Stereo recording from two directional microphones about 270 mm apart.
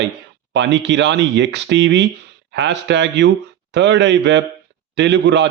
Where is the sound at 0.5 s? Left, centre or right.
Right.